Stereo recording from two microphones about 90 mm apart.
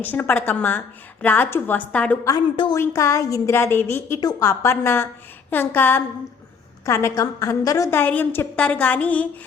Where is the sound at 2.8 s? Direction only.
35° left (ahead or behind).